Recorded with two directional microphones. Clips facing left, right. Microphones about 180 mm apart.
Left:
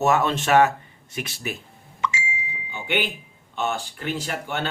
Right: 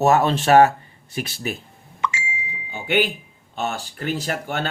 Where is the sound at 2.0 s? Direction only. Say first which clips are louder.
Right 1 dB; 55° right (ahead or behind).